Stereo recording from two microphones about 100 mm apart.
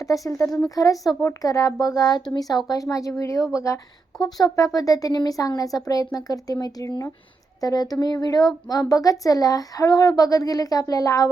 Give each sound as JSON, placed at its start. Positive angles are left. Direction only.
{"t": 0.0, "sound": "speech", "side_deg": 35}